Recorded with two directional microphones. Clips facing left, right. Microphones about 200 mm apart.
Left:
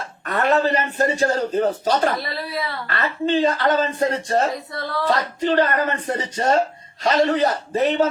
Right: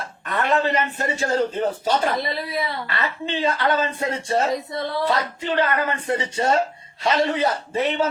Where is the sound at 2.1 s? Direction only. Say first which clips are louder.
Right 1 dB; 20° right (ahead or behind).